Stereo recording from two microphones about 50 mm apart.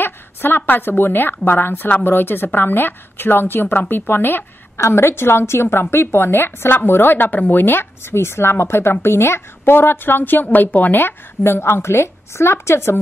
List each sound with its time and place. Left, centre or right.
0.0 s a woman's voice: left
4.7 s a woman's voice: left
10.4 s a woman's voice: left